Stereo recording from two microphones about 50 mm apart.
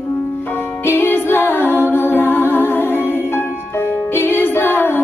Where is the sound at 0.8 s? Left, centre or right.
Left.